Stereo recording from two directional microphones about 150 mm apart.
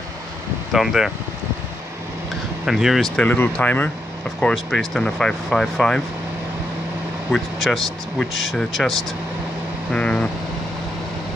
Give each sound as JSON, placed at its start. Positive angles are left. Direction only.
{"t": 0.7, "sound": "speech", "side_deg": -5}
{"t": 2.6, "sound": "speech", "side_deg": 0}
{"t": 3.3, "sound": "speech", "side_deg": 10}
{"t": 7.2, "sound": "speech", "side_deg": 0}
{"t": 9.9, "sound": "speech", "side_deg": 5}